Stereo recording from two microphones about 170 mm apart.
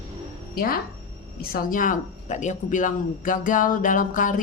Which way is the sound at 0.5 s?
60° left (ahead or behind).